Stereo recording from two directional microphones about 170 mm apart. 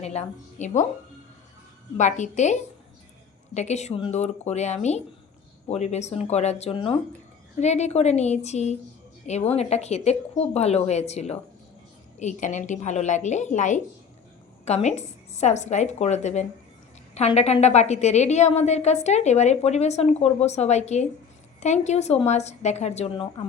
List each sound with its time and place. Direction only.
0.0 s a woman's voice: 40° left (ahead or behind)
2.0 s a woman's voice: 45° left (ahead or behind)